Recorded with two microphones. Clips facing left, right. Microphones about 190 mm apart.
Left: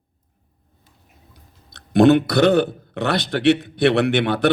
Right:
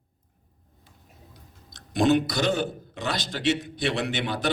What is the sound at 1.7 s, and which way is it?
A man's voice, 60° left (ahead or behind).